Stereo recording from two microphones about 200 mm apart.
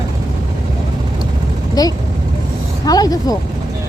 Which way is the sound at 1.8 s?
20° left (ahead or behind).